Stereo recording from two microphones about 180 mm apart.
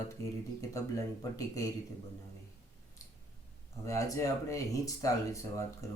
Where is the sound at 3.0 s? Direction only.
20° left (ahead or behind).